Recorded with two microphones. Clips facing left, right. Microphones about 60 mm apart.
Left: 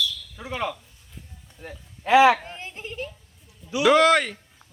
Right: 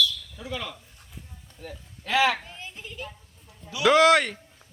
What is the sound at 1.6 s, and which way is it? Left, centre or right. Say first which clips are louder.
Speech: left 5 dB; left.